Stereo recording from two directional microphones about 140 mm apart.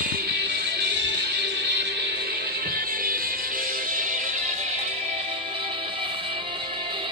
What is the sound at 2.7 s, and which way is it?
Music, 90° right.